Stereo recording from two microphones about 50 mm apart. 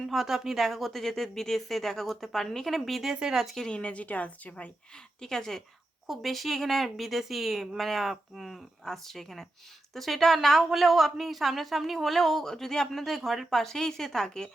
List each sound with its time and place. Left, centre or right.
0.1 s a woman's voice: centre
3.0 s speech: centre
3.4 s a woman's voice: centre
3.7 s a woman's voice: left
5.2 s a woman's voice: centre
8.8 s a woman's voice: centre
13.5 s speech: centre